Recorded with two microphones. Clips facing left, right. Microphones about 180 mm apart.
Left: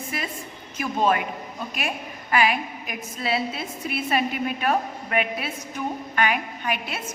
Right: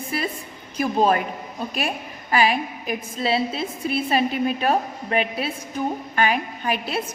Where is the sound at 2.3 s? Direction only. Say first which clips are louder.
Right 2 dB; 30° right (ahead or behind).